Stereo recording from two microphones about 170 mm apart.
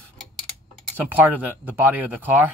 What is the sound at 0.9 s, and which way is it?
Speech, 10° right (ahead or behind).